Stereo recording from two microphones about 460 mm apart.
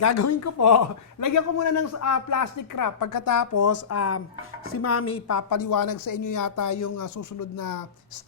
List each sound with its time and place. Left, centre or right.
0.0 s a man's voice: left